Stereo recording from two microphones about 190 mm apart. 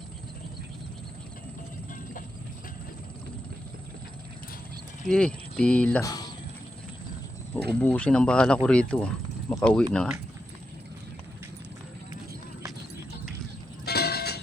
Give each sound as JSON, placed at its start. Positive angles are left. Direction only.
{"t": 5.0, "sound": "speech", "side_deg": 5}
{"t": 6.0, "sound": "speech", "side_deg": 20}
{"t": 7.7, "sound": "speech", "side_deg": 5}
{"t": 13.8, "sound": "horse", "side_deg": 55}